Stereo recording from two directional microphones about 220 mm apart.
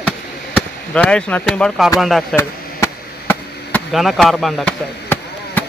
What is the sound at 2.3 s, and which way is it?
Chop, 10° left (ahead or behind).